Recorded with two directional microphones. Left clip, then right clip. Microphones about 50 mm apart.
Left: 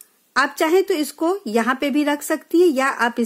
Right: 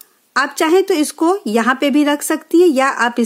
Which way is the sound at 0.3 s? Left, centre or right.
Right.